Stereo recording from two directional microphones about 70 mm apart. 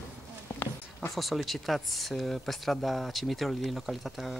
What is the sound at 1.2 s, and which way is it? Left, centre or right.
Speech, centre.